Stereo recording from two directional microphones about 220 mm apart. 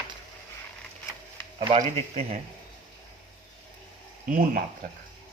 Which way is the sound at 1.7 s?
30° right (ahead or behind).